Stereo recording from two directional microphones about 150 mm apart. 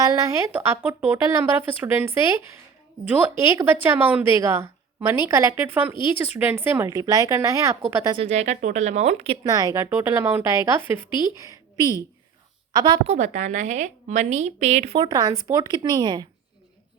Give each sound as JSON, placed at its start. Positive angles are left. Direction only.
{"t": 0.0, "sound": "a woman's voice", "side_deg": -20}
{"t": 8.1, "sound": "a woman's voice", "side_deg": -45}
{"t": 9.4, "sound": "a woman's voice", "side_deg": -25}
{"t": 11.3, "sound": "a sound", "side_deg": -20}
{"t": 12.7, "sound": "a woman's voice", "side_deg": -30}
{"t": 13.1, "sound": "a woman's voice", "side_deg": -55}